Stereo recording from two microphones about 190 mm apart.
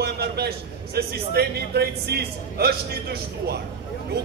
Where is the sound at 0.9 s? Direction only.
55° right (ahead or behind).